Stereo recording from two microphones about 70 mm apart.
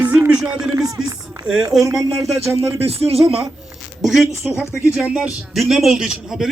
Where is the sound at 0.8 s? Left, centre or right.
Right.